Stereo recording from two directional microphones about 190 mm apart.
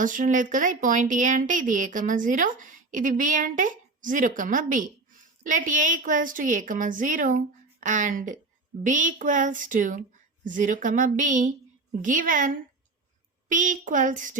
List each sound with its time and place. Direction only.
0.0 s speech: 45° right (ahead or behind)